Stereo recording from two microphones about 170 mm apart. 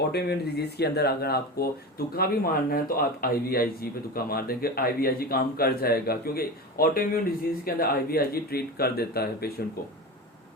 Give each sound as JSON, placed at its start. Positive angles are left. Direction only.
{"t": 0.1, "sound": "speech", "side_deg": 75}